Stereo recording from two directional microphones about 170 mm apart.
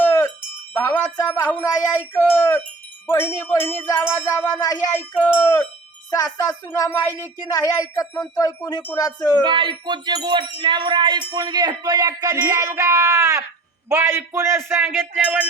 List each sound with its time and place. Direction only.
0.0 s wind chime: 15° left (ahead or behind)
1.2 s music: 10° left (ahead or behind)
6.1 s speech: 20° left (ahead or behind)
9.4 s a sound: 30° right (ahead or behind)
13.9 s speech: 15° right (ahead or behind)